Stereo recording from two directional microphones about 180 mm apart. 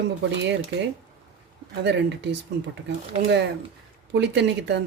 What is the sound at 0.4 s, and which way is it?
Speech, 75° right (ahead or behind).